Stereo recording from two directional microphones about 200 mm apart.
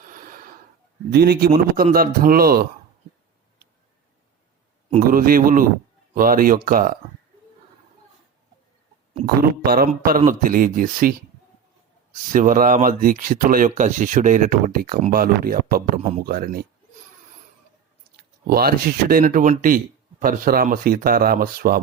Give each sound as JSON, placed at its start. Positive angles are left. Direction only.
{"t": 0.0, "sound": "a sound", "side_deg": -45}
{"t": 1.1, "sound": "speech", "side_deg": -50}
{"t": 4.9, "sound": "speech", "side_deg": -40}
{"t": 9.1, "sound": "speech", "side_deg": -50}
{"t": 12.3, "sound": "speech", "side_deg": -40}
{"t": 18.4, "sound": "speech", "side_deg": -50}